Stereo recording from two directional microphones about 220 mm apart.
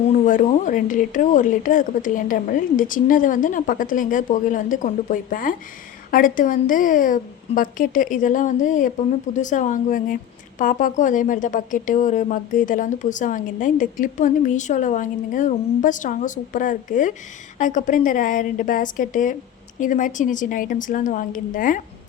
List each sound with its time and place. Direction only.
0.1 s a woman's voice: 35° left (ahead or behind)